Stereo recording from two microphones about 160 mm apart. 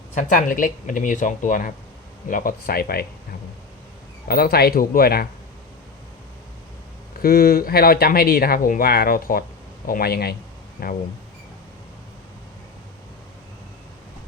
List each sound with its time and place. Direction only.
0.1 s speech: 50° left (ahead or behind); by 3.1 s 70° left (ahead or behind)
4.3 s speech: 70° left (ahead or behind)
7.2 s speech: 65° left (ahead or behind)